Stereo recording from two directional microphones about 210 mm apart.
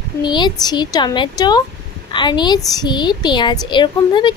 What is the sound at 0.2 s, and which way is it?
A woman's voice, 20° left (ahead or behind).